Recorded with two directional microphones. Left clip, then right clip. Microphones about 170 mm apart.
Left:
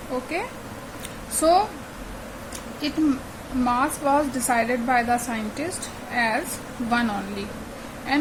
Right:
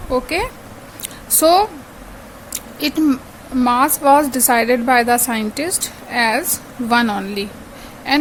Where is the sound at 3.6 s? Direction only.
60° right (ahead or behind).